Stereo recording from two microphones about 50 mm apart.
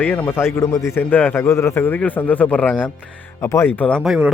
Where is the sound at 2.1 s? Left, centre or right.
Left.